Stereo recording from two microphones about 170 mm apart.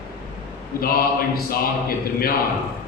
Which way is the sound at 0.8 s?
60° left (ahead or behind).